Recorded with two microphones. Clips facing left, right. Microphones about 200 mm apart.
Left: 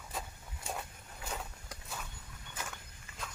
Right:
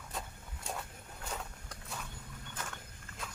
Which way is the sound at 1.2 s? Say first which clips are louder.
Left 1 dB; 5° left (ahead or behind).